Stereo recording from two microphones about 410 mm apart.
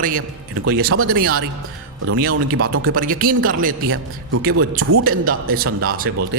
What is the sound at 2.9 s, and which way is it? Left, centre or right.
A man's voice, centre.